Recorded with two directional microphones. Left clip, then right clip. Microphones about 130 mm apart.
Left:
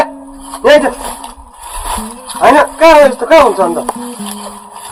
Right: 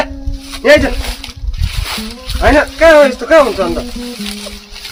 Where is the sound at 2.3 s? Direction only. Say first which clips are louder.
Left 3 dB; 50° right (ahead or behind).